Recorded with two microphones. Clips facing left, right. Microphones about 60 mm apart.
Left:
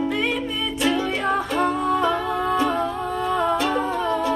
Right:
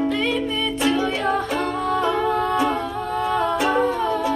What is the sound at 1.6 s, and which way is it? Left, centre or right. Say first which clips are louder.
Music: left 2 dB; centre.